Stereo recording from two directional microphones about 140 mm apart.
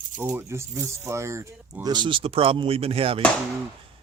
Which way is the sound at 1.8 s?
30° right (ahead or behind).